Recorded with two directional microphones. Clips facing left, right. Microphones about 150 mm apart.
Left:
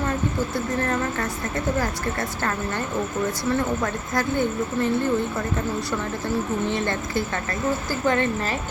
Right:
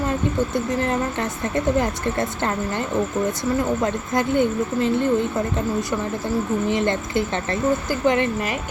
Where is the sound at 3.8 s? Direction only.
20° right (ahead or behind).